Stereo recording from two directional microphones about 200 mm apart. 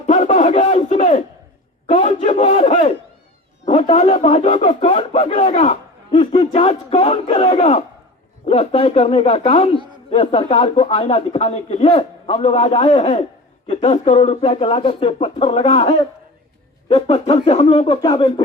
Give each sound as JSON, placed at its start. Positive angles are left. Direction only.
{"t": 0.0, "sound": "a sound", "side_deg": 35}
{"t": 2.0, "sound": "a man's voice", "side_deg": 30}
{"t": 17.3, "sound": "speech", "side_deg": 30}